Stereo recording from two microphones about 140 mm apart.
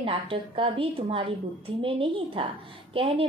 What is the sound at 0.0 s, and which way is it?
A woman's voice, 40° right (ahead or behind).